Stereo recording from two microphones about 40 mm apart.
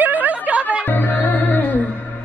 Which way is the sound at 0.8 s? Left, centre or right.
Left.